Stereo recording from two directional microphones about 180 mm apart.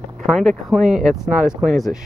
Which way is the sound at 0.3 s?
Centre (ahead or behind).